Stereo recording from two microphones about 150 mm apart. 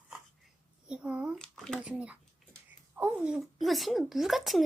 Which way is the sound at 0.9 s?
5° right (ahead or behind).